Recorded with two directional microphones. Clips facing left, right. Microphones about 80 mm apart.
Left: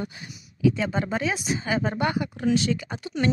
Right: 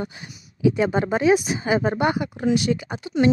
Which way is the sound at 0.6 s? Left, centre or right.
Right.